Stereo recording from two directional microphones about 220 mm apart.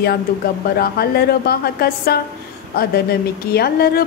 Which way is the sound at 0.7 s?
45° left (ahead or behind).